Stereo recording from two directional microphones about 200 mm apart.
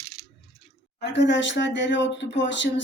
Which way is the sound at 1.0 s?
60° left (ahead or behind).